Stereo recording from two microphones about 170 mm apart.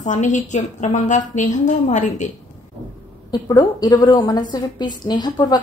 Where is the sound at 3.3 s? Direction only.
25° left (ahead or behind).